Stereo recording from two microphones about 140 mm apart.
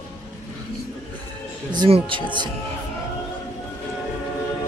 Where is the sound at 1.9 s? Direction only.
35° right (ahead or behind).